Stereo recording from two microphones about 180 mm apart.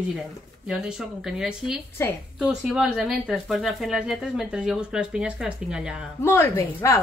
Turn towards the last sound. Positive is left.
turn(degrees=15)  # may be behind; listen again after turning